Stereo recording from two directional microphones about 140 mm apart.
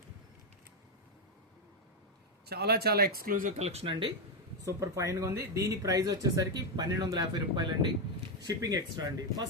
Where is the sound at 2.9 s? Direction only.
90° right; by 4.1 s 35° right (ahead or behind).